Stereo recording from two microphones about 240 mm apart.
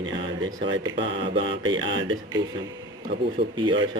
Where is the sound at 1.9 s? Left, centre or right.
Right.